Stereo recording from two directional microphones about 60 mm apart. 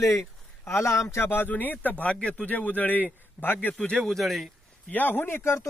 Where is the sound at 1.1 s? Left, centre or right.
Left.